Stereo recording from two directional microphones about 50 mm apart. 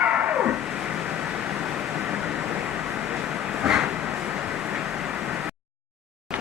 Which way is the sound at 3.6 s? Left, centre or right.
Centre.